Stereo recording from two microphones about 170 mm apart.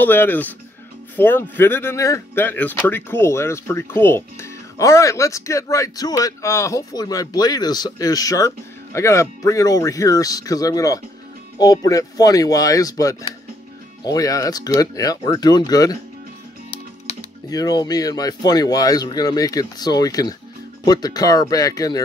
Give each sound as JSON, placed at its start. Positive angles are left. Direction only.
{"t": 0.0, "sound": "speech", "side_deg": 10}
{"t": 17.5, "sound": "speech", "side_deg": 20}